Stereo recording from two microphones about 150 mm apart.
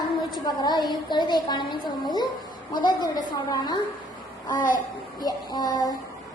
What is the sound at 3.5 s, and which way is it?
Speech, 30° left (ahead or behind).